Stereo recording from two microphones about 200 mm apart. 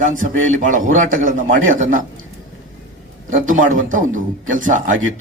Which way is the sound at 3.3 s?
40° right (ahead or behind).